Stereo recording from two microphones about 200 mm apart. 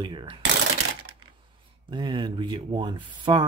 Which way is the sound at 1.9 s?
25° right (ahead or behind).